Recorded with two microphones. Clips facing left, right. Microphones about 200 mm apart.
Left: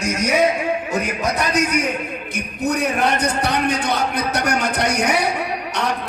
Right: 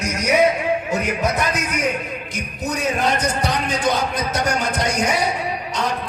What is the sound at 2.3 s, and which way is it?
A man's voice, 60° left (ahead or behind).